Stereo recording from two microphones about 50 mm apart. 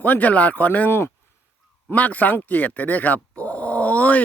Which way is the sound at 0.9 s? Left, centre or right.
Left.